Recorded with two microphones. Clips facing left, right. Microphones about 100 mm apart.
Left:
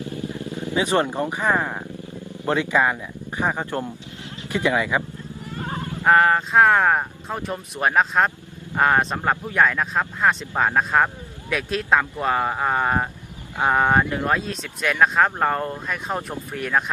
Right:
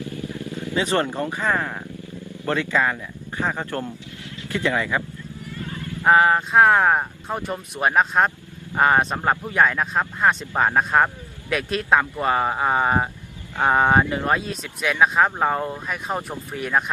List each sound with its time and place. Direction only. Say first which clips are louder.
0.0 s vehicle: left 1 dB; 20° left (ahead or behind)
2.4 s speech: left 2 dB; 15° left (ahead or behind)
5.6 s wild animals: left 4 dB; 25° left (ahead or behind)
6.1 s speech: even; 5° right (ahead or behind)